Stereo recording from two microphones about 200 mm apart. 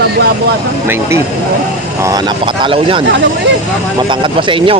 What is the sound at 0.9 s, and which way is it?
Speech, 15° right (ahead or behind).